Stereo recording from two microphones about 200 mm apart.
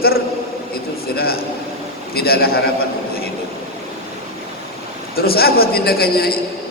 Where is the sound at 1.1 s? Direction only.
50° left (ahead or behind).